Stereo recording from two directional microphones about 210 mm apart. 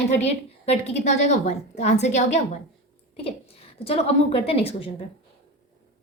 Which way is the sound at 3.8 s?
30° left (ahead or behind).